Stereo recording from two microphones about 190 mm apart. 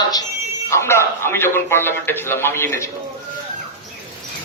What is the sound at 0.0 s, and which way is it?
Buzzer, 20° left (ahead or behind).